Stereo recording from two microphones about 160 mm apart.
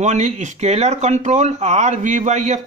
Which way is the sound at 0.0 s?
45° right (ahead or behind).